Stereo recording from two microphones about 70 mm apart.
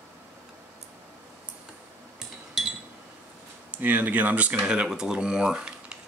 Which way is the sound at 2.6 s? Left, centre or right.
Centre.